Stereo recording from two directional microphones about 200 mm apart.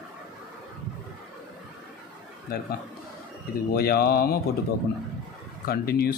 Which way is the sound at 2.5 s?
50° left (ahead or behind).